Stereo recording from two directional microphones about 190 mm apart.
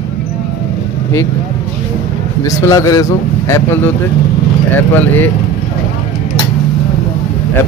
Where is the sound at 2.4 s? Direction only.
15° left (ahead or behind).